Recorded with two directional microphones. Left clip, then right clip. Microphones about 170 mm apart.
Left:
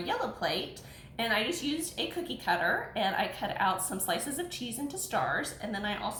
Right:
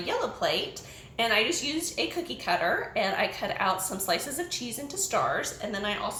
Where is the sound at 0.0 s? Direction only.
10° right (ahead or behind).